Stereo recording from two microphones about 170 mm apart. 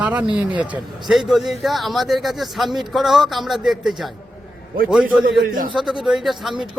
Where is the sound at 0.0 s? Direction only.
10° right (ahead or behind).